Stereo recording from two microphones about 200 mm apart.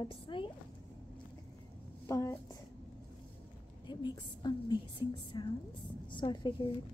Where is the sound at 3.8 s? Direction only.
20° left (ahead or behind).